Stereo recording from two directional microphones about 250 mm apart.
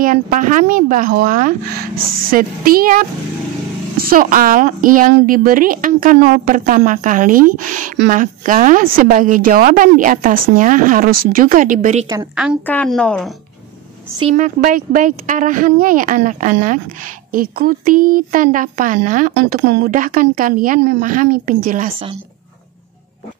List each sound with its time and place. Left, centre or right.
0.0 s a woman's voice: right
12.1 s a woman's voice: centre
12.6 s a woman's voice: centre
14.2 s a woman's voice: right